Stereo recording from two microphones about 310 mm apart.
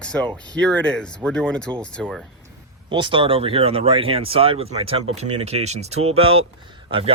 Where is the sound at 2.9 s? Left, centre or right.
Centre.